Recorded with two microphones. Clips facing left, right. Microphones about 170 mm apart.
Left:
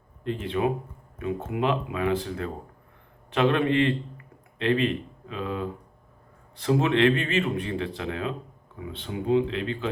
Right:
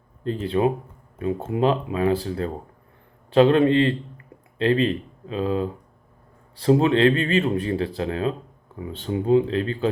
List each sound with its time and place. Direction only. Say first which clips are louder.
0.3 s speech: right 4 dB; 35° right (ahead or behind)